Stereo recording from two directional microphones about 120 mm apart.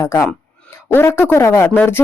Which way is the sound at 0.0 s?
25° left (ahead or behind).